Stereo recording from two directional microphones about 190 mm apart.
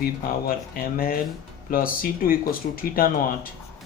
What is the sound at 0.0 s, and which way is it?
Speech, 50° left (ahead or behind).